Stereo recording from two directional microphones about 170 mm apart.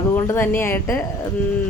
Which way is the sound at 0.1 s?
15° left (ahead or behind).